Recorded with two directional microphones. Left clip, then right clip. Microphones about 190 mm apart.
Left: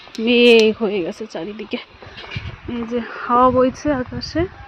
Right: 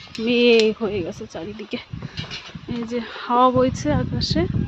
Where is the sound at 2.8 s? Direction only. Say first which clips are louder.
Left 4 dB; 5° left (ahead or behind).